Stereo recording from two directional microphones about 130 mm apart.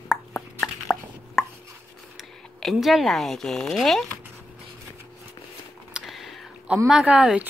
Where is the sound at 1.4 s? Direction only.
Centre (ahead or behind).